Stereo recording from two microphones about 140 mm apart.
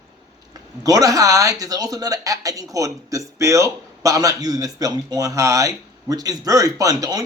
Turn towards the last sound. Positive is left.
turn(degrees=-25)  # may be behind; listen again after turning